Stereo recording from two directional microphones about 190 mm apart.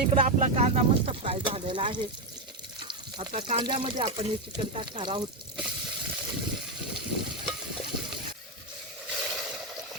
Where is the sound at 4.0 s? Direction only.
30° right (ahead or behind).